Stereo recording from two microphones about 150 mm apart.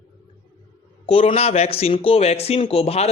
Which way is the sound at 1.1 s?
40° left (ahead or behind).